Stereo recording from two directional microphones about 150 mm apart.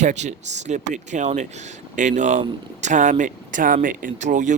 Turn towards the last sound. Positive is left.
turn(degrees=-55)  # may be behind; listen again after turning